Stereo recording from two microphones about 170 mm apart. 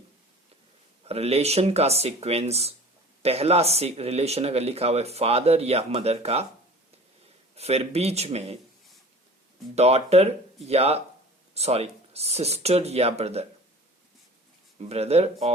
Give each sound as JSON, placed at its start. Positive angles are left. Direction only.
{"t": 1.0, "sound": "speech", "side_deg": -35}
{"t": 7.5, "sound": "speech", "side_deg": -35}
{"t": 9.7, "sound": "speech", "side_deg": -40}
{"t": 14.8, "sound": "speech", "side_deg": -35}